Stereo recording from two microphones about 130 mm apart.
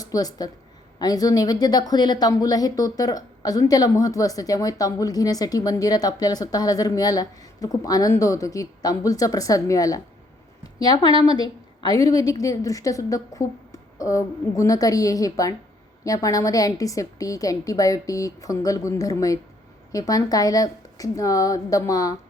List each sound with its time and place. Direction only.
0.0 s a woman's voice: 30° left (ahead or behind)